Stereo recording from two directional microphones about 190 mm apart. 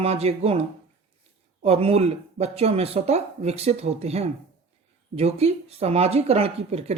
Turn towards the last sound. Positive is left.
turn(degrees=-35)  # may be behind; listen again after turning